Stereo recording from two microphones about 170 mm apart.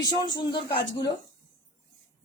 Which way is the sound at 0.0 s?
25° left (ahead or behind).